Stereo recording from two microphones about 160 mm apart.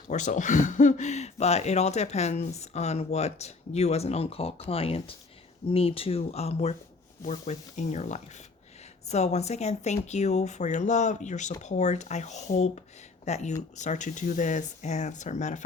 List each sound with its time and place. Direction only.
0.1 s speech: 50° left (ahead or behind)